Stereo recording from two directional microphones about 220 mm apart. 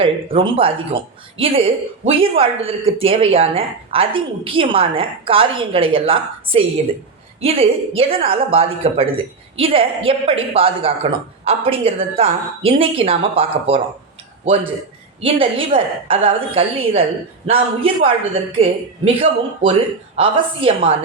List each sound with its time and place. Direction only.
0.0 s a woman's voice: 25° right (ahead or behind)
15.2 s a woman's voice: 25° right (ahead or behind)